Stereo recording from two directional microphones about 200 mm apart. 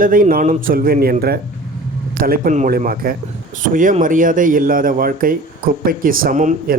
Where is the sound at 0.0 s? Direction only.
45° right (ahead or behind).